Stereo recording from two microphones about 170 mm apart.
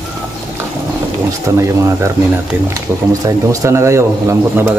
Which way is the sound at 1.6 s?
15° right (ahead or behind).